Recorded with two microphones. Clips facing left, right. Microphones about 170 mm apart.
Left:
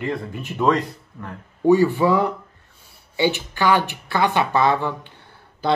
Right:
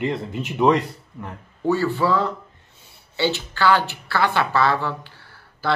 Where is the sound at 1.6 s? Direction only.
15° left (ahead or behind).